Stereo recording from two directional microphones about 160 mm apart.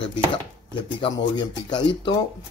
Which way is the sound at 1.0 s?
30° left (ahead or behind).